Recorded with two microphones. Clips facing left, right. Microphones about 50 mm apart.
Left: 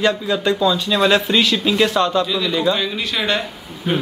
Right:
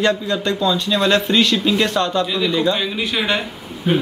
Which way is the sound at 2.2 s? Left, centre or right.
Centre.